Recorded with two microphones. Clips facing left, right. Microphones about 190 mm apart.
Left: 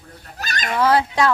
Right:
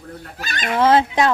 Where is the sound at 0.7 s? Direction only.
25° right (ahead or behind).